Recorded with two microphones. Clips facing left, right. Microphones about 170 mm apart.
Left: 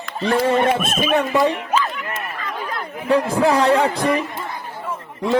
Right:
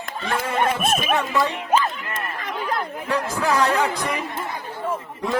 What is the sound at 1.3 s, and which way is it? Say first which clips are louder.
Speech: left 5 dB; 20° left (ahead or behind).